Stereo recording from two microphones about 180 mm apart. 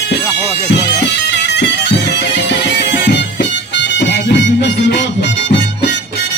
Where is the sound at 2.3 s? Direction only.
75° left (ahead or behind).